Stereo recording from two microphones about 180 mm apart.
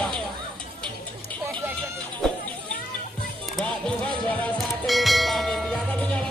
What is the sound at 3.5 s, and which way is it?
Music, 5° left (ahead or behind).